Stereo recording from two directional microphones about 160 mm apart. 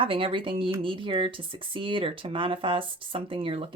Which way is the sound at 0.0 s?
35° right (ahead or behind).